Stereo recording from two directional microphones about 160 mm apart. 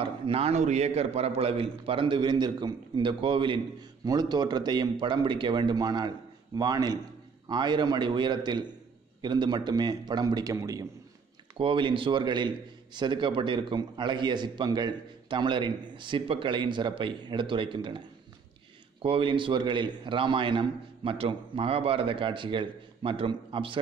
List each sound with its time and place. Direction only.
0.0 s a man's voice: 40° right (ahead or behind); by 10.9 s 20° right (ahead or behind)
11.5 s a man's voice: 30° right (ahead or behind)
19.0 s a man's voice: 30° right (ahead or behind)